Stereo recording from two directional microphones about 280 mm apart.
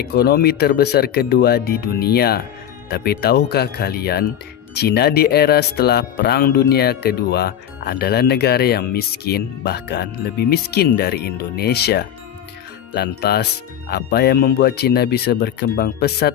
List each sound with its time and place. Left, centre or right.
0.0 s speech: left